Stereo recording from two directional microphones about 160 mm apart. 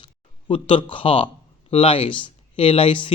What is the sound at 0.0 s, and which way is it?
Speech, 30° left (ahead or behind).